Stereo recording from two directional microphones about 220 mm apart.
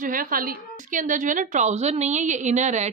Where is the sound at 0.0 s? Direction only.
40° right (ahead or behind).